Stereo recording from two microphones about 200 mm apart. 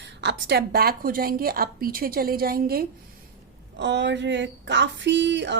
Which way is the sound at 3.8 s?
60° right (ahead or behind).